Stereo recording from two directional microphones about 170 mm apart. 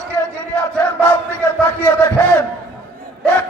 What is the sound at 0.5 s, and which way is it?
Battle cry, 5° left (ahead or behind).